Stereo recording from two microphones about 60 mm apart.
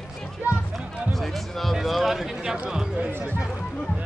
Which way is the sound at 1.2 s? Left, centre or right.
Centre.